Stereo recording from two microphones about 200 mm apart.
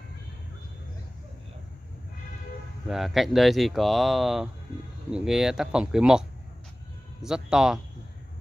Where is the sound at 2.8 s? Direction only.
Centre (ahead or behind).